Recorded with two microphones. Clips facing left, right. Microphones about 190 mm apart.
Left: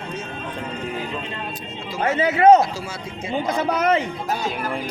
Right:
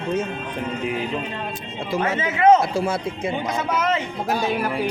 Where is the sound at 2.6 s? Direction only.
55° right (ahead or behind).